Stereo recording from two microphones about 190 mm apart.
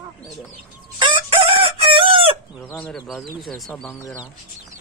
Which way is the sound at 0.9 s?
25° right (ahead or behind).